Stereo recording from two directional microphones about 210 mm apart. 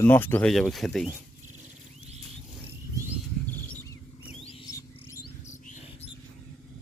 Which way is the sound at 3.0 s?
15° right (ahead or behind).